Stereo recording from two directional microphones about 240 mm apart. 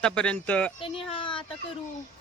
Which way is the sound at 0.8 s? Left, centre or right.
Left.